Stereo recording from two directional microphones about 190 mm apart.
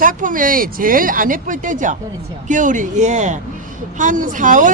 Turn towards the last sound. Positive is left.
turn(degrees=-45)  # may be behind; listen again after turning